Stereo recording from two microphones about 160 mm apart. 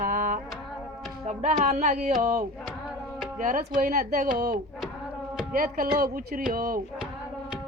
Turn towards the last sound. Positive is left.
turn(degrees=-65)  # may be behind; listen again after turning